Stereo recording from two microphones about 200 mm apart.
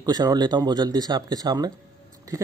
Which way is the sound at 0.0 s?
20° right (ahead or behind).